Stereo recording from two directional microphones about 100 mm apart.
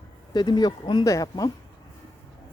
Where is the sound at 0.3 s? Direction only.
45° left (ahead or behind).